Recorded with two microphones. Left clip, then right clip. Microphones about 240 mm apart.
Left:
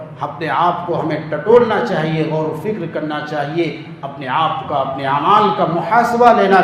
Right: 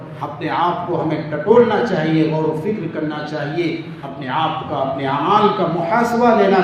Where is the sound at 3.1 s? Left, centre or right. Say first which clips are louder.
Left 3 dB; left.